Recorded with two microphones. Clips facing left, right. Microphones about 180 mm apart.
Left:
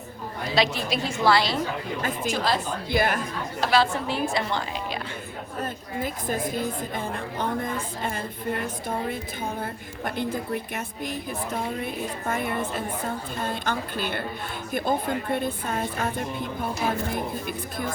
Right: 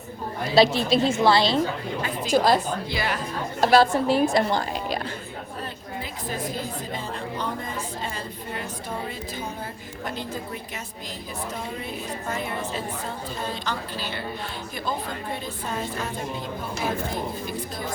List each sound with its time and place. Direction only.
0.5 s a woman's voice: 30° right (ahead or behind)
2.0 s a woman's voice: 50° left (ahead or behind)
2.3 s a woman's voice: 45° right (ahead or behind)
2.9 s a woman's voice: 50° left (ahead or behind)
3.6 s a woman's voice: 45° right (ahead or behind)
6.0 s a woman's voice: 50° left (ahead or behind)
12.3 s a woman's voice: 55° left (ahead or behind)